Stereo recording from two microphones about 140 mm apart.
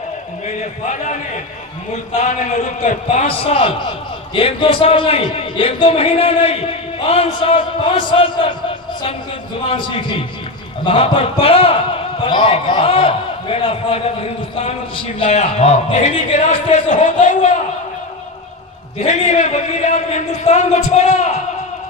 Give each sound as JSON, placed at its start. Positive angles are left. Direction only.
{"t": 0.9, "sound": "a man's voice", "side_deg": 60}
{"t": 9.6, "sound": "a man's voice", "side_deg": 40}
{"t": 15.2, "sound": "speech", "side_deg": 50}
{"t": 19.0, "sound": "speech", "side_deg": 55}